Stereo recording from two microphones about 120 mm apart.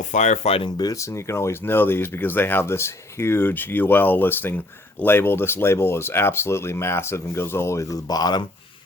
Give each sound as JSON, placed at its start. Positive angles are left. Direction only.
{"t": 0.0, "sound": "speech", "side_deg": 85}
{"t": 0.8, "sound": "speech", "side_deg": 30}